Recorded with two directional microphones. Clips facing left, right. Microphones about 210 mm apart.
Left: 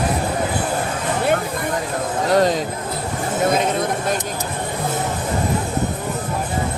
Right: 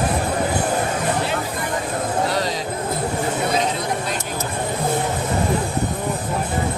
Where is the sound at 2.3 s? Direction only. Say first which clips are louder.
Left 7 dB; 50° left (ahead or behind).